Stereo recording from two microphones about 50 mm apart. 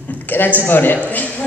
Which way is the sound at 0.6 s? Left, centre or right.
Left.